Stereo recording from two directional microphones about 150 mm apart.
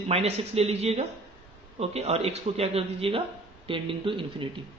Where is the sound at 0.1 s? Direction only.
40° right (ahead or behind).